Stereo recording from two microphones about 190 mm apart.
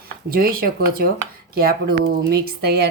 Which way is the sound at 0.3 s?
50° right (ahead or behind).